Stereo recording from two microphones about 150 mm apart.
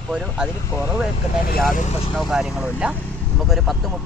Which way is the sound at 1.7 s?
45° left (ahead or behind).